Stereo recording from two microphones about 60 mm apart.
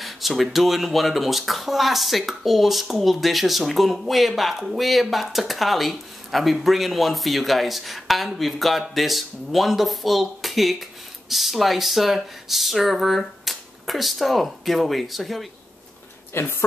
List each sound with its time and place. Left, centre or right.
0.0 s speech: centre
16.3 s speech: left